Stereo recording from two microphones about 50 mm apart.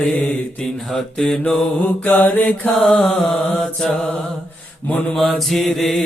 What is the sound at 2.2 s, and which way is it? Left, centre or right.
Music, left.